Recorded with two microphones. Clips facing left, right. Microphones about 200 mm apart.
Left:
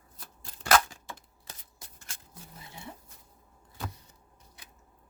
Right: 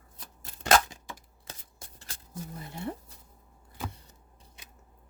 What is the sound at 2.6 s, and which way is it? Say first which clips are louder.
Speech: right 9 dB; 60° right (ahead or behind).